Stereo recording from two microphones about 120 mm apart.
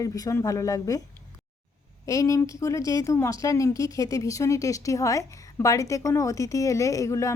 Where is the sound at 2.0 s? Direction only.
25° left (ahead or behind).